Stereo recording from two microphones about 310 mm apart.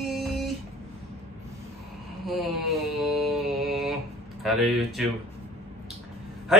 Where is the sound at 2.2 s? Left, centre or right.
Centre.